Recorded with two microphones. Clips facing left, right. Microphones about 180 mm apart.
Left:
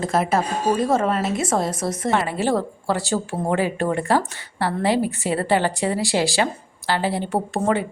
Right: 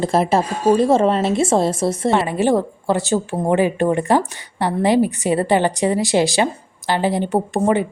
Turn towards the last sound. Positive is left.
turn(degrees=-20)  # may be behind; listen again after turning